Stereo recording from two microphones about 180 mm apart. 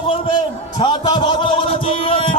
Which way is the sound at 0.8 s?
25° left (ahead or behind).